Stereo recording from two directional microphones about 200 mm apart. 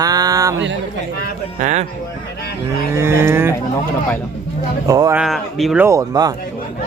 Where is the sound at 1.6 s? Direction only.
35° right (ahead or behind).